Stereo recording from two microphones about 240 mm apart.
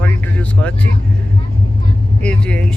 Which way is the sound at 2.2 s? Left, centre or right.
Centre.